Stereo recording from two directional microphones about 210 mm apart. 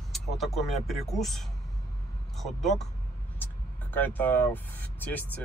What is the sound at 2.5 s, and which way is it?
Speech, centre (ahead or behind).